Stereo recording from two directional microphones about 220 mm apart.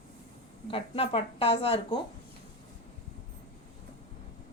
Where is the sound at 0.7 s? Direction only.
25° left (ahead or behind).